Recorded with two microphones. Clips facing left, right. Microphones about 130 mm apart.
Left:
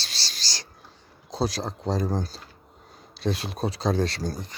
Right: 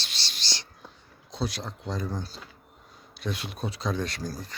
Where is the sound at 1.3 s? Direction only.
35° left (ahead or behind).